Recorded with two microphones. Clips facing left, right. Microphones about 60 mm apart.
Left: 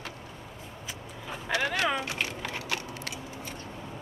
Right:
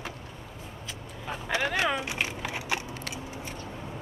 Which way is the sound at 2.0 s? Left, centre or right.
Centre.